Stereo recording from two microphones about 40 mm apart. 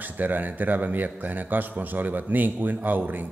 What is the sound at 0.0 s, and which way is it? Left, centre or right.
A man's voice, right.